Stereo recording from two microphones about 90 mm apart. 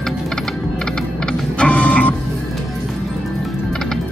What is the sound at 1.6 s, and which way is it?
Printer, 15° left (ahead or behind).